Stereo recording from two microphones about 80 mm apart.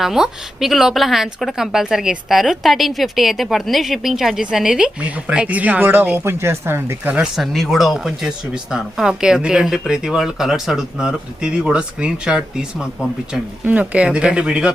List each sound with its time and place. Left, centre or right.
0.0 s speech: centre; by 7.1 s right
7.1 s speech: centre